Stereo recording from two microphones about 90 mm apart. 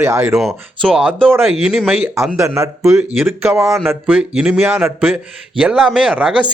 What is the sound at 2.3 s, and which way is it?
Speech, 35° right (ahead or behind).